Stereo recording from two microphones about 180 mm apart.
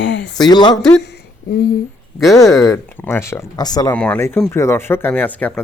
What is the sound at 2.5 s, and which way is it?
Speech, 15° left (ahead or behind).